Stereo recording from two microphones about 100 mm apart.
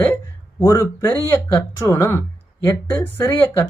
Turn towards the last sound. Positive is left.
turn(degrees=25)  # may be behind; listen again after turning